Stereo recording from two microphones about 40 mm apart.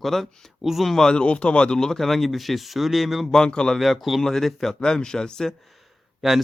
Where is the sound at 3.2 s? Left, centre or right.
Centre.